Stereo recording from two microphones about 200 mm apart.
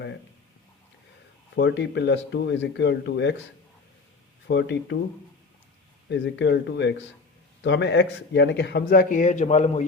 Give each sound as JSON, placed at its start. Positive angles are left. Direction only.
{"t": 1.5, "sound": "speech", "side_deg": 60}
{"t": 4.4, "sound": "speech", "side_deg": 60}
{"t": 6.1, "sound": "speech", "side_deg": 60}